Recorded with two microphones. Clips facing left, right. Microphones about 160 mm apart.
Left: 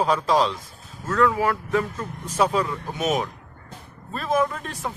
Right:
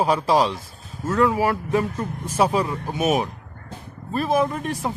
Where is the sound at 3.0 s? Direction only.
10° right (ahead or behind).